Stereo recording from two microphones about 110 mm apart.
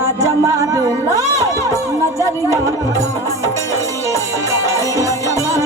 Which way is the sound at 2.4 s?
30° right (ahead or behind).